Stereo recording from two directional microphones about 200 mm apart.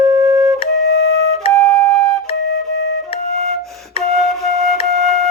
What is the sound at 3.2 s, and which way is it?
Flute, 35° right (ahead or behind).